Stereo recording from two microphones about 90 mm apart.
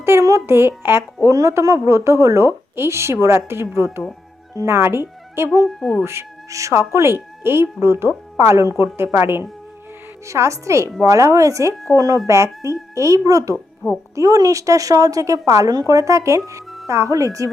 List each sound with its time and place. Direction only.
0.0 s speech: 30° right (ahead or behind)
1.3 s a woman's voice: 35° right (ahead or behind)
5.6 s a woman's voice: centre (ahead or behind)
6.0 s a woman's voice: 30° right (ahead or behind)